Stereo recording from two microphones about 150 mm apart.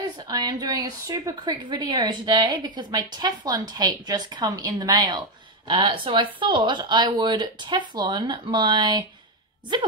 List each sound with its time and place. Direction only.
0.3 s a woman's voice: 30° right (ahead or behind)